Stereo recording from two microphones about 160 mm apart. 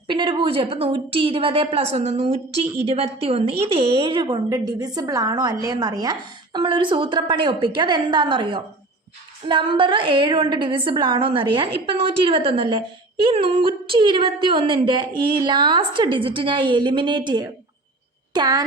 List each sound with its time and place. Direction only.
0.1 s a woman's voice: 30° right (ahead or behind)